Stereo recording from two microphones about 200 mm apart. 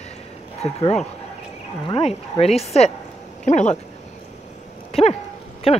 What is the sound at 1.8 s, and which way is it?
Speech, 25° left (ahead or behind).